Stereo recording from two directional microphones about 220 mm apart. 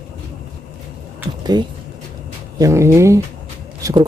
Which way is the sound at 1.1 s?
20° right (ahead or behind).